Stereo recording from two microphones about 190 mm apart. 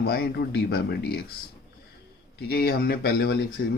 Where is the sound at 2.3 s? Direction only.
55° left (ahead or behind).